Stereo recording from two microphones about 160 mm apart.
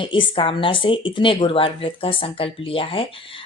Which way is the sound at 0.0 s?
30° left (ahead or behind).